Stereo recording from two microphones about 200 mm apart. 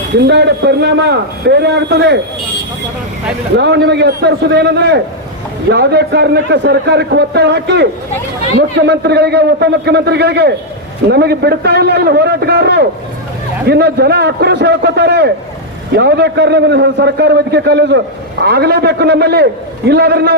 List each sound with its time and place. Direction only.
0.3 s a man's voice: 60° right (ahead or behind)
3.6 s a man's voice: 60° right (ahead or behind)